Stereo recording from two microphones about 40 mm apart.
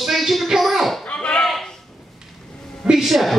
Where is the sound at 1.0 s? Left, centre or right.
Left.